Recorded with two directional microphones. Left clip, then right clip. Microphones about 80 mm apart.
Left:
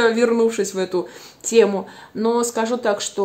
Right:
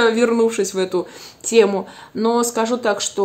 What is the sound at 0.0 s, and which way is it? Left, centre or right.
A woman's voice, centre.